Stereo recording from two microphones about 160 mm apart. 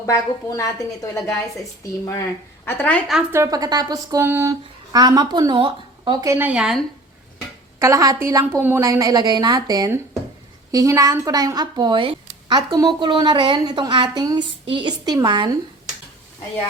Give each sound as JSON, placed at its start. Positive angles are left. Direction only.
{"t": 0.0, "sound": "a woman's voice", "side_deg": 20}
{"t": 1.8, "sound": "a woman's voice", "side_deg": 20}
{"t": 3.3, "sound": "speech", "side_deg": -20}
{"t": 7.8, "sound": "speech", "side_deg": -20}